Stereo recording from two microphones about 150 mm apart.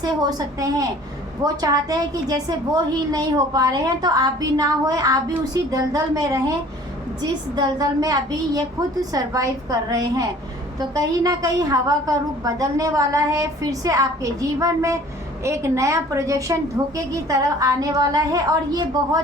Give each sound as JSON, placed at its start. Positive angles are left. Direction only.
{"t": 0.0, "sound": "a woman's voice", "side_deg": -25}